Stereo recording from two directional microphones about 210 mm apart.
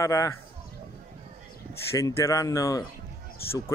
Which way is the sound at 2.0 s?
15° left (ahead or behind).